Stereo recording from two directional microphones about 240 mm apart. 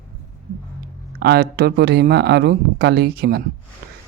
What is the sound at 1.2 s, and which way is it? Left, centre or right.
Speech, right.